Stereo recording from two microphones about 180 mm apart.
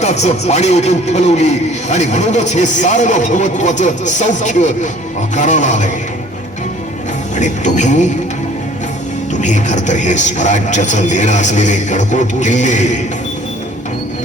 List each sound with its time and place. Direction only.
0.0 s a man's voice: 40° left (ahead or behind)
7.3 s a man's voice: 40° left (ahead or behind)
9.3 s a man's voice: 40° left (ahead or behind)